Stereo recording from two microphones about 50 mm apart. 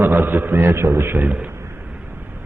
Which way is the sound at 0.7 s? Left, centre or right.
Right.